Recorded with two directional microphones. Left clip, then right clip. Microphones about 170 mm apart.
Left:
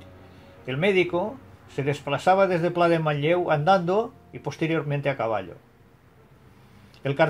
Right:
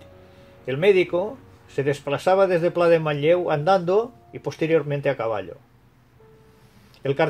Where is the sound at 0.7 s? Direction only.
45° right (ahead or behind).